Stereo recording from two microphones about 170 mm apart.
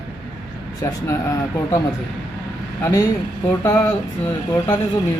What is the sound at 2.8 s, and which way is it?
A man's voice, 20° left (ahead or behind).